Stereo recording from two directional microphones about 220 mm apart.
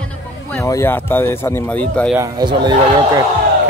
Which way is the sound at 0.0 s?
10° left (ahead or behind).